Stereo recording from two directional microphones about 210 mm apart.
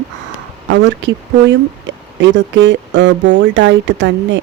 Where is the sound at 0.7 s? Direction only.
60° right (ahead or behind).